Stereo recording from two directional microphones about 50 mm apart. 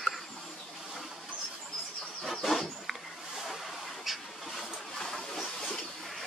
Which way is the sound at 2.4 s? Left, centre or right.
Centre.